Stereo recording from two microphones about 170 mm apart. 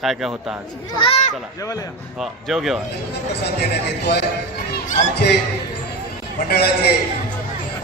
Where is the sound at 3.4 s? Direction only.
75° left (ahead or behind).